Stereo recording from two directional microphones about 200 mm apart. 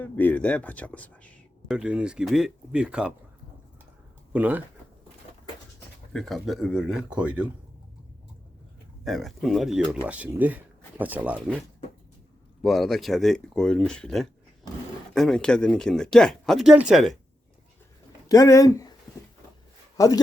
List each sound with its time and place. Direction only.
0.0 s speech: 10° left (ahead or behind)
1.7 s speech: 5° right (ahead or behind)
4.3 s speech: 10° right (ahead or behind)
6.1 s speech: centre (ahead or behind)
9.0 s speech: centre (ahead or behind)
12.6 s speech: centre (ahead or behind)
18.3 s speech: 15° left (ahead or behind)
20.0 s speech: 15° left (ahead or behind)